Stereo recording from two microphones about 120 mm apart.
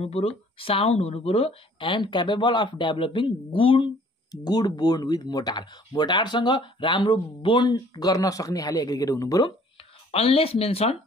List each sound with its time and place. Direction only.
0.0 s speech: 55° left (ahead or behind)
4.3 s speech: 35° left (ahead or behind)
10.1 s speech: 50° left (ahead or behind)